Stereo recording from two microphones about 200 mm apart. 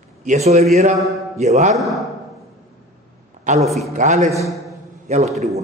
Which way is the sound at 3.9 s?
40° right (ahead or behind).